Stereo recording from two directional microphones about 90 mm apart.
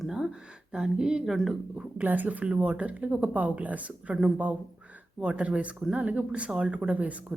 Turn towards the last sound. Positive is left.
turn(degrees=-15)  # may be behind; listen again after turning